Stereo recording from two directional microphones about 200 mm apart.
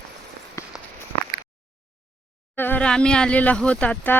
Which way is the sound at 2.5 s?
10° left (ahead or behind).